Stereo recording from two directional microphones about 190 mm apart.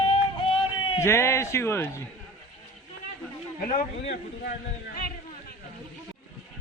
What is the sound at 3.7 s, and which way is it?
Speech, 45° left (ahead or behind).